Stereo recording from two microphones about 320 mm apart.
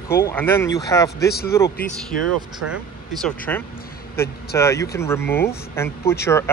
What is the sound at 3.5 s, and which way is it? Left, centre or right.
Speech, centre.